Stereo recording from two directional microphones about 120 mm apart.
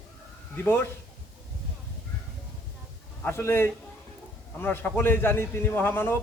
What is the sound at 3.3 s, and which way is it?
A man's voice, 20° left (ahead or behind).